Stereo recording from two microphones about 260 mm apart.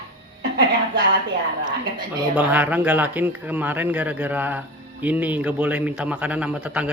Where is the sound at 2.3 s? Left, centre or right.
Centre.